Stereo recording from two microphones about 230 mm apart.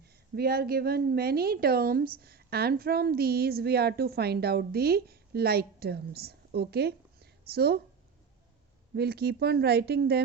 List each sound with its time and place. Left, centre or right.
0.0 s a woman's voice: right
9.0 s a woman's voice: right